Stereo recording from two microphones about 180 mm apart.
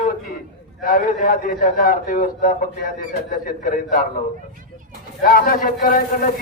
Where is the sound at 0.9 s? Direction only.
50° left (ahead or behind).